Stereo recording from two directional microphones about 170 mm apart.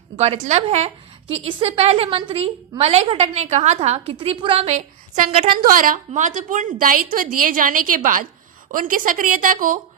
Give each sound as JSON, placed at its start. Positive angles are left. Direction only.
{"t": 0.2, "sound": "a woman's voice", "side_deg": -40}
{"t": 5.5, "sound": "a woman's voice", "side_deg": -55}